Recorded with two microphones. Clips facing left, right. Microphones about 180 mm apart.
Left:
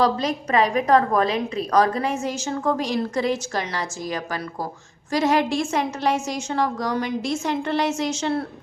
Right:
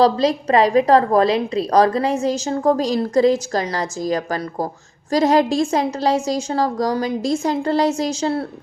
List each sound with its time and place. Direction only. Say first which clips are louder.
0.0 s a woman's voice: right 6 dB; 35° right (ahead or behind)